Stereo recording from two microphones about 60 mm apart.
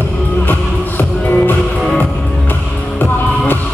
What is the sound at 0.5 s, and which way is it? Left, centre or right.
Music, left.